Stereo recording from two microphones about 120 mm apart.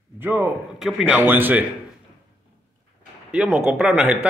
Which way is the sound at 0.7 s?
5° right (ahead or behind).